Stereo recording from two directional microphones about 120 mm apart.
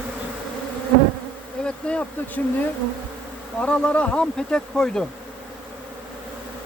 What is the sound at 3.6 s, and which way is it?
Speech, 10° left (ahead or behind).